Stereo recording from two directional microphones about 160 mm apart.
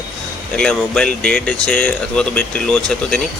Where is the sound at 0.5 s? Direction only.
5° left (ahead or behind).